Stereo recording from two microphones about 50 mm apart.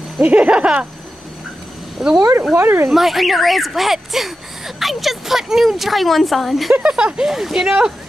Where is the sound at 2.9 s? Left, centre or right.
Centre.